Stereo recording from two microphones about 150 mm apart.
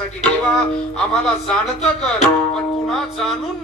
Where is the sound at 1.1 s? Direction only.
5° left (ahead or behind).